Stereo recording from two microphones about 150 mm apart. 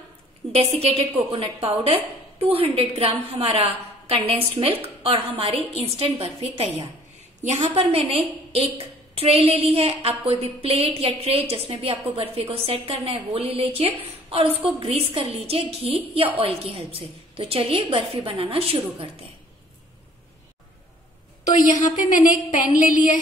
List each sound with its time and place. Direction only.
0.5 s a woman's voice: 40° right (ahead or behind)
21.5 s a woman's voice: 60° left (ahead or behind)